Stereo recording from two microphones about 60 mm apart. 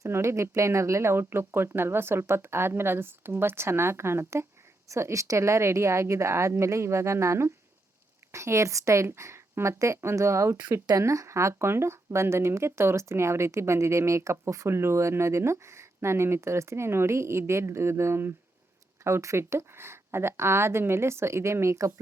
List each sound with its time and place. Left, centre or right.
0.0 s speech: right
10.9 s speech: right
14.7 s speech: right
19.0 s speech: right